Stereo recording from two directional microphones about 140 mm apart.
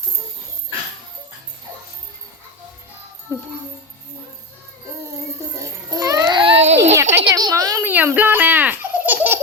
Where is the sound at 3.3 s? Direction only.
20° right (ahead or behind).